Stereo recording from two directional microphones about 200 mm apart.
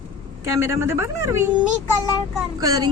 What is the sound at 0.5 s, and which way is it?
Speech, 15° right (ahead or behind).